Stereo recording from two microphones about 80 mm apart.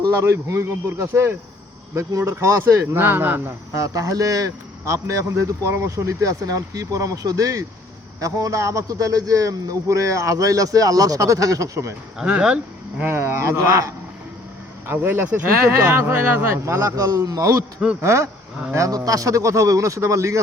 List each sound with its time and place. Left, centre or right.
0.0 s a man's voice: right
3.8 s speech: right
12.2 s speech: centre
13.0 s a man's voice: right
14.9 s a man's voice: right
18.7 s speech: right